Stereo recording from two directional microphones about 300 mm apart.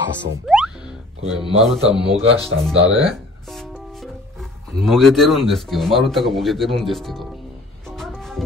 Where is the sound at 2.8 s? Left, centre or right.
Right.